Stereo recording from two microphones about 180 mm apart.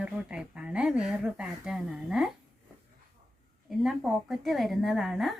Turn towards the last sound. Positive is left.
turn(degrees=0)  # may be behind; listen again after turning